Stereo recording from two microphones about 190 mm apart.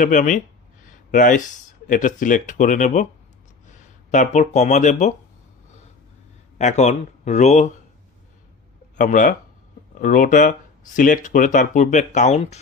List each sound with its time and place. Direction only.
0.0 s speech: 40° left (ahead or behind)
4.1 s speech: 40° left (ahead or behind)
6.6 s speech: 35° left (ahead or behind)
8.9 s speech: 45° left (ahead or behind)